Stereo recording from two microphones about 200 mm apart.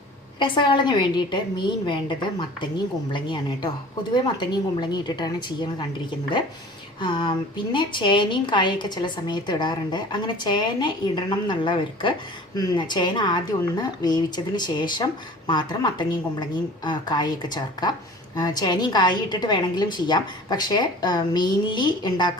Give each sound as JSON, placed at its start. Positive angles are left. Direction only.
{"t": 0.3, "sound": "a woman's voice", "side_deg": 25}
{"t": 7.0, "sound": "a woman's voice", "side_deg": 25}